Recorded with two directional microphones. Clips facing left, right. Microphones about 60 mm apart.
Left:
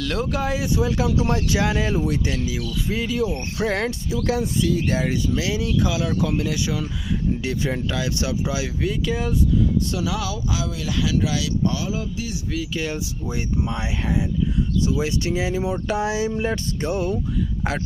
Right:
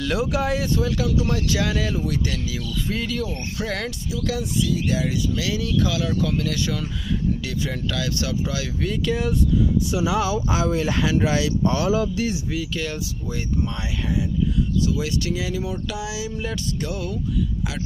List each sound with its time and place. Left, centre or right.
0.0 s speech: centre
0.8 s speech: left
3.7 s speech: left
7.4 s speech: left
8.9 s speech: centre
9.9 s speech: right
12.7 s speech: centre
16.0 s a sound: left